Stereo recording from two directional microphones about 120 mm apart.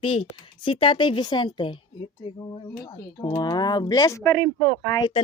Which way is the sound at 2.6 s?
25° left (ahead or behind).